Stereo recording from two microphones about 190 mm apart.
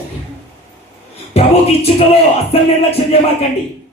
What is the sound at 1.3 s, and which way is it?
Speech, 30° left (ahead or behind).